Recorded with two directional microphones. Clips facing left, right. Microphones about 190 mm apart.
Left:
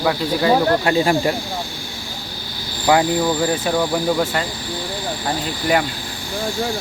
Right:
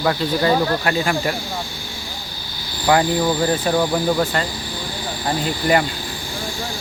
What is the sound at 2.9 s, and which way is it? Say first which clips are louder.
Speech: left 1 dB; 10° left (ahead or behind).